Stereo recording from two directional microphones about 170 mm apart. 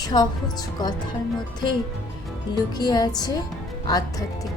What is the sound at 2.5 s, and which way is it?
Speech, 25° left (ahead or behind).